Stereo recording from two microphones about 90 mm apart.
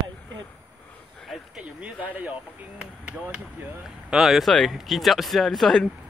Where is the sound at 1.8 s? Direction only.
15° right (ahead or behind).